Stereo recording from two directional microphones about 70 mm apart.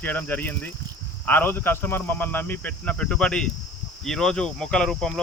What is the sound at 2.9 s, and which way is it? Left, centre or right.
Speech, centre.